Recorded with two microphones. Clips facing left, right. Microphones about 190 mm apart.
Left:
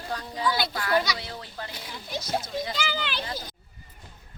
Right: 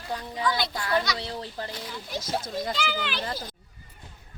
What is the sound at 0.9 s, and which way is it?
Speech, centre (ahead or behind).